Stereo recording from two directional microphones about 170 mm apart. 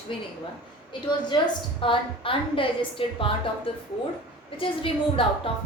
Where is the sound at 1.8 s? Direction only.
30° left (ahead or behind).